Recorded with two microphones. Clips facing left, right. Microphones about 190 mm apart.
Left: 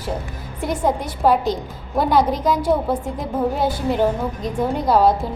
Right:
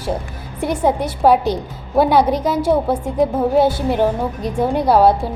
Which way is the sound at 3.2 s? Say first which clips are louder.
Right 9 dB; 65° right (ahead or behind).